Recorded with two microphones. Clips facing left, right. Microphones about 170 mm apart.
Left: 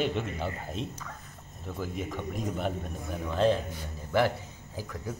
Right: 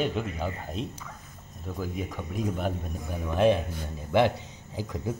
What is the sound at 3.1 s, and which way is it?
A man's voice, 15° right (ahead or behind).